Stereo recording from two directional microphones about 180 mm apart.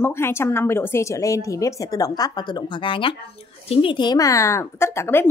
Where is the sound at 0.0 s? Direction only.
15° left (ahead or behind).